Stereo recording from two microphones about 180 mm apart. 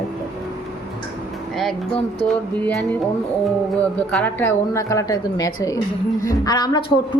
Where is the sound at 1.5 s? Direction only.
Centre (ahead or behind).